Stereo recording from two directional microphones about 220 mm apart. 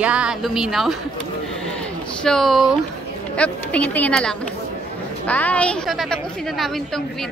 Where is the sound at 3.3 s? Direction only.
5° left (ahead or behind).